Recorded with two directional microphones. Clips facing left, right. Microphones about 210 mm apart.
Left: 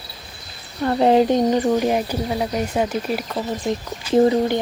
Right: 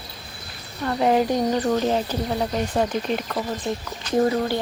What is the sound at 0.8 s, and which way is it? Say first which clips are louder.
Speech: left 4 dB; 30° left (ahead or behind).